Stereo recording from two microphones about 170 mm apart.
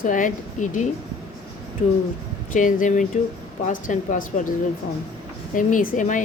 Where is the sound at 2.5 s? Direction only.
50° left (ahead or behind).